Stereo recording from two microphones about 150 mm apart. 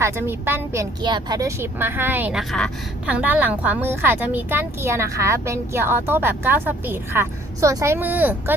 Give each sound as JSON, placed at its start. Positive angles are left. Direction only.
{"t": 0.0, "sound": "speech", "side_deg": -15}
{"t": 1.0, "sound": "speech", "side_deg": -30}
{"t": 3.1, "sound": "speech", "side_deg": -10}